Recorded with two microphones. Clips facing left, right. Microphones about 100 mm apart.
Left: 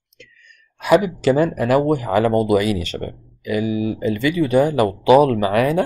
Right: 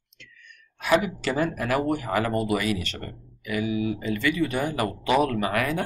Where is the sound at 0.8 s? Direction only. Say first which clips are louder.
Left 8 dB; 15° left (ahead or behind).